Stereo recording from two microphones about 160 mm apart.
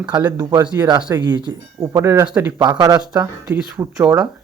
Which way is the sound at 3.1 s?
5° right (ahead or behind).